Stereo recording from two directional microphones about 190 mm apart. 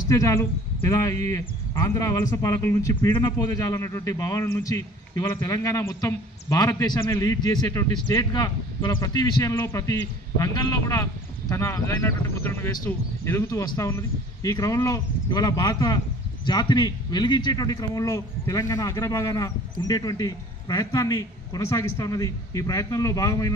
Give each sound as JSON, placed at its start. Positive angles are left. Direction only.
{"t": 0.1, "sound": "a man's voice", "side_deg": 15}